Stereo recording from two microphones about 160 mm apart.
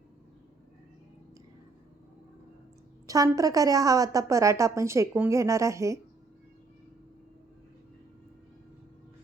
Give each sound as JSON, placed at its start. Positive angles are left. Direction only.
{"t": 3.1, "sound": "a woman's voice", "side_deg": -20}